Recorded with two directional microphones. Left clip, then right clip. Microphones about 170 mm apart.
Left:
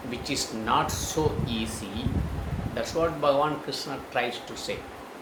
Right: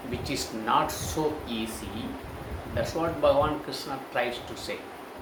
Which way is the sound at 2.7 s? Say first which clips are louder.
Left 2 dB; 15° left (ahead or behind).